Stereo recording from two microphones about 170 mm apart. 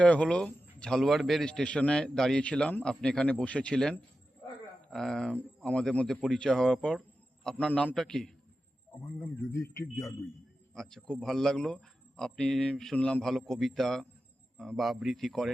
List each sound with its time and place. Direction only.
0.0 s speech: 5° left (ahead or behind)
9.5 s a man's voice: 15° left (ahead or behind)
10.8 s speech: 5° left (ahead or behind)